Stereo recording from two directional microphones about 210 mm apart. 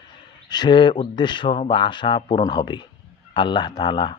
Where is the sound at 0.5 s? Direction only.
20° left (ahead or behind).